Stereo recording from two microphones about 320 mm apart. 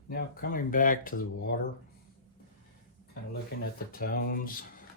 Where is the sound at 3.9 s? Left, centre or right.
Left.